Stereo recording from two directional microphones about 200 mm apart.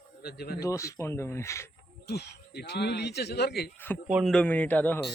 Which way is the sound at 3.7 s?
10° left (ahead or behind).